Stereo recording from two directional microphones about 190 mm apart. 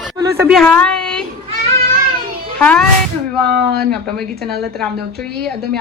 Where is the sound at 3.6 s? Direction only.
55° right (ahead or behind).